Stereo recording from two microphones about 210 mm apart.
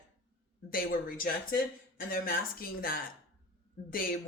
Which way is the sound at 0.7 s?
45° left (ahead or behind).